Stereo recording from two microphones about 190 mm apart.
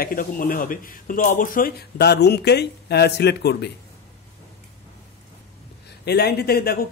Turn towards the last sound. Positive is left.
turn(degrees=55)  # may be behind; listen again after turning